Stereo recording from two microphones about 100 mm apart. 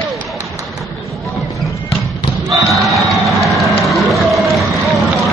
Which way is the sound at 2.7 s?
Centre (ahead or behind).